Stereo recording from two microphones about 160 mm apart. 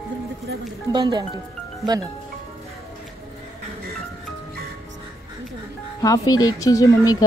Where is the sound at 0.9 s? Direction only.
25° right (ahead or behind).